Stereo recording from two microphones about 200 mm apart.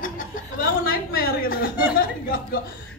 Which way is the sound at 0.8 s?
50° left (ahead or behind).